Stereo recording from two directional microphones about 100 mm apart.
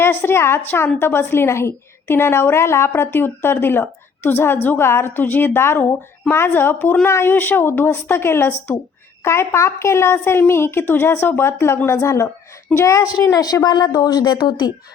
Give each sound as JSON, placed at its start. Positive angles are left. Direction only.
{"t": 0.0, "sound": "a woman's voice", "side_deg": 25}